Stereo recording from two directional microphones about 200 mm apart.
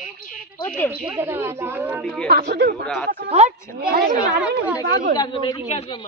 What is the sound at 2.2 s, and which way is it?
Speech, 55° right (ahead or behind).